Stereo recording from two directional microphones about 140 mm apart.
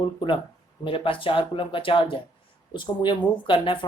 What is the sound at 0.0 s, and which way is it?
A woman's voice, 35° left (ahead or behind).